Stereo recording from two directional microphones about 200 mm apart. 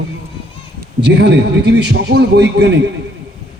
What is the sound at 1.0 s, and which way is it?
A man's voice, 60° right (ahead or behind).